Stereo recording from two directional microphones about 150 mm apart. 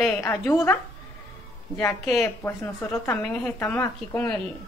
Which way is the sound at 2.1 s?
20° left (ahead or behind).